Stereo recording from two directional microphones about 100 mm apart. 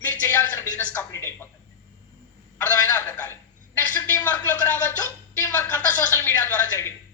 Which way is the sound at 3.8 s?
20° left (ahead or behind).